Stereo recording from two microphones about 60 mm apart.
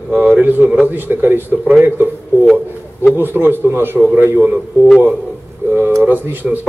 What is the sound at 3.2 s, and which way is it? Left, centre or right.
Speech, right.